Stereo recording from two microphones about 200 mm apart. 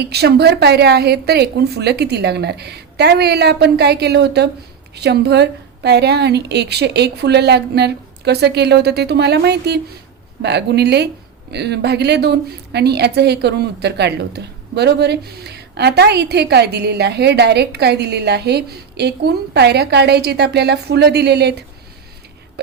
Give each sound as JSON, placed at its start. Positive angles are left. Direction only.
{"t": 0.0, "sound": "a woman's voice", "side_deg": -55}